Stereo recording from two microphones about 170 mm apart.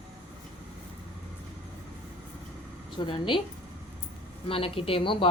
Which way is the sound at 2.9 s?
30° left (ahead or behind).